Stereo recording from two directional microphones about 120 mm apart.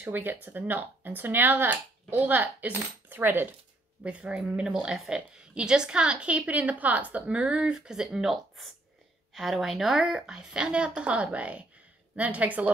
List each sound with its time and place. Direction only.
0.0 s a woman's voice: 15° right (ahead or behind)